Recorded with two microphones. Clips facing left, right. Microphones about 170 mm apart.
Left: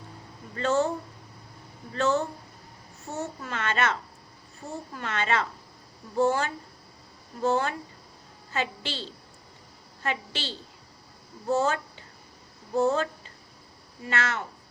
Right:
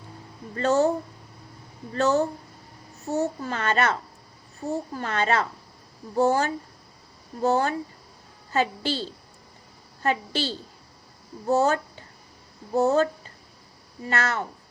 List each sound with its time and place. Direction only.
0.5 s a child's voice: 40° right (ahead or behind)
1.9 s a child's voice: 40° right (ahead or behind)
4.9 s a child's voice: 40° right (ahead or behind)
14.1 s a child's voice: 40° right (ahead or behind)